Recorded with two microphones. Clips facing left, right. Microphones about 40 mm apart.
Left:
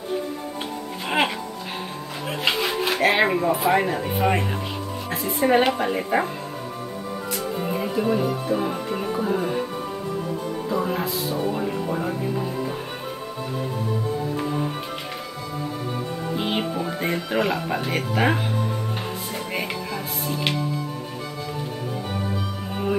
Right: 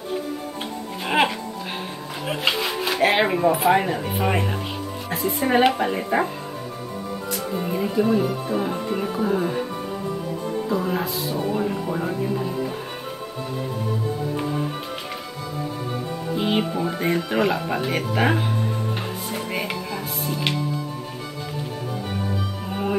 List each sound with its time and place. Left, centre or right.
1.0 s music: centre
2.4 s music: centre
3.1 s speech: centre
7.6 s speech: centre
10.7 s speech: centre
16.3 s speech: centre
19.3 s music: centre